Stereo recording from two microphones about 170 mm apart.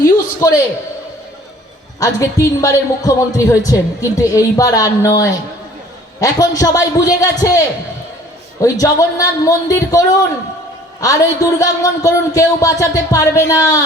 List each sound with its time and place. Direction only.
0.0 s a sound: 20° left (ahead or behind)
2.0 s a man's voice: 20° left (ahead or behind)
8.6 s a man's voice: 20° left (ahead or behind)
11.0 s a man's voice: 20° left (ahead or behind)